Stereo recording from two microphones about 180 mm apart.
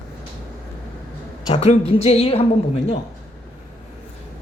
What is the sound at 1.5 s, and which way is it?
Speech, 35° left (ahead or behind).